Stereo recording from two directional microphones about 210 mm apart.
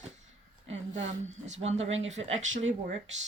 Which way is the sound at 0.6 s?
35° right (ahead or behind).